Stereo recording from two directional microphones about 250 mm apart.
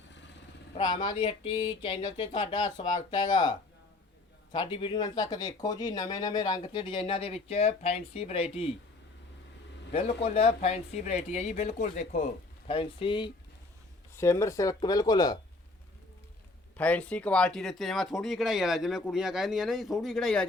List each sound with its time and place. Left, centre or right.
0.9 s speech: left
4.5 s speech: centre
9.9 s speech: left
16.7 s speech: centre